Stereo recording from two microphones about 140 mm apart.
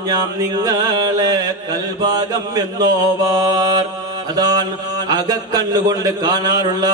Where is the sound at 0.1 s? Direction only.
30° right (ahead or behind).